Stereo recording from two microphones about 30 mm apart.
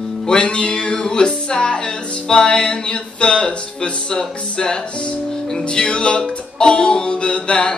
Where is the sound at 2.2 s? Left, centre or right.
Left.